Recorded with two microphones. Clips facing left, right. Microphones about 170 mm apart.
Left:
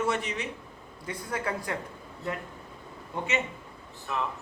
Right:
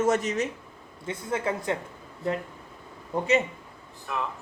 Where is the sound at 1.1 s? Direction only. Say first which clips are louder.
Right 4 dB; 25° right (ahead or behind).